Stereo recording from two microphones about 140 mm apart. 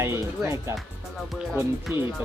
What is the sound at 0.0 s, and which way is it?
Music, 20° right (ahead or behind).